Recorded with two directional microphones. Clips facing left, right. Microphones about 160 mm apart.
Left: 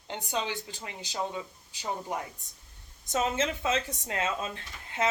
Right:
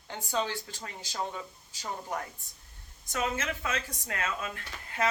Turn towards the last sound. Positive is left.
turn(degrees=25)  # may be behind; listen again after turning